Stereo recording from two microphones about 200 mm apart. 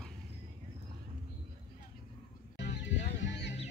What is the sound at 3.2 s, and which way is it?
Music, 60° left (ahead or behind).